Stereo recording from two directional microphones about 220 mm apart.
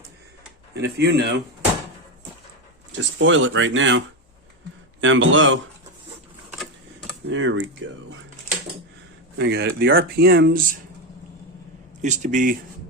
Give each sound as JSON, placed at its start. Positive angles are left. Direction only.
{"t": 0.7, "sound": "speech", "side_deg": -50}
{"t": 3.2, "sound": "speech", "side_deg": -60}
{"t": 7.3, "sound": "speech", "side_deg": -60}
{"t": 9.4, "sound": "speech", "side_deg": -50}
{"t": 12.0, "sound": "speech", "side_deg": -35}